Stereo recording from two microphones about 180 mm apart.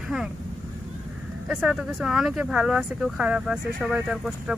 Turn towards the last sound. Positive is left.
turn(degrees=-5)  # may be behind; listen again after turning